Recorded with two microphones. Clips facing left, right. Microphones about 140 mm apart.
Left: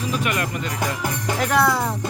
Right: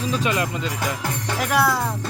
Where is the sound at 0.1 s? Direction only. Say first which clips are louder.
Right 2 dB; 20° right (ahead or behind).